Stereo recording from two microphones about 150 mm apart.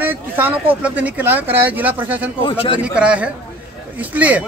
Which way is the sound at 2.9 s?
5° right (ahead or behind).